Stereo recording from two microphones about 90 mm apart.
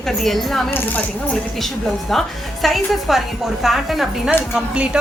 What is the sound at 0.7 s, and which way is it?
Speech, 25° left (ahead or behind).